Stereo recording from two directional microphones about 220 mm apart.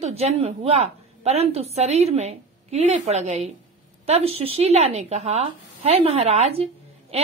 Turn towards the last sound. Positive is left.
turn(degrees=-30)  # may be behind; listen again after turning